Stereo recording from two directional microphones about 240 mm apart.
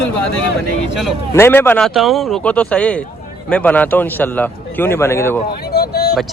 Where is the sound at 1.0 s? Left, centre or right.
Centre.